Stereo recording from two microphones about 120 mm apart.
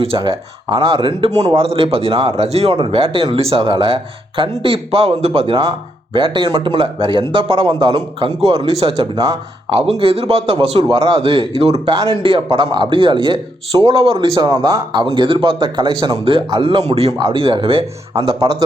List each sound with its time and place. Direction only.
0.2 s a man's voice: 45° right (ahead or behind)
8.7 s speech: 50° right (ahead or behind)
10.8 s a man's voice: 35° right (ahead or behind)
11.6 s speech: 55° right (ahead or behind)
11.9 s a man's voice: 40° right (ahead or behind)
14.3 s a man's voice: 30° right (ahead or behind)
15.0 s speech: 45° right (ahead or behind)
16.8 s speech: 60° right (ahead or behind)
17.2 s speech: 45° right (ahead or behind)
18.3 s a man's voice: 30° right (ahead or behind)